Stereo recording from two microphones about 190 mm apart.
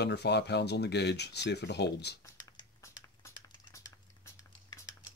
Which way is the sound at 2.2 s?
15° left (ahead or behind).